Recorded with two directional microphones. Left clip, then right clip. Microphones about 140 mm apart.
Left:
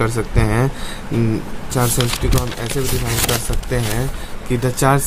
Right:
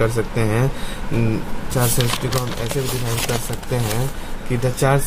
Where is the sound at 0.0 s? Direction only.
40° left (ahead or behind).